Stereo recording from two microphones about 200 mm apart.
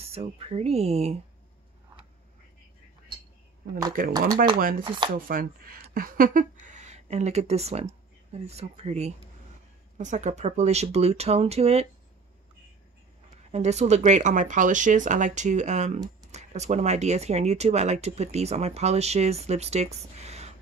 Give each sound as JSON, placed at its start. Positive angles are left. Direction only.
{"t": 0.0, "sound": "speech", "side_deg": -30}
{"t": 3.6, "sound": "speech", "side_deg": -50}
{"t": 4.6, "sound": "chopping", "side_deg": -45}
{"t": 5.3, "sound": "speech", "side_deg": -45}
{"t": 13.5, "sound": "speech", "side_deg": -35}